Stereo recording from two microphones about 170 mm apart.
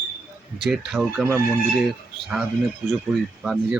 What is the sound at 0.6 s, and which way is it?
Speech, centre (ahead or behind).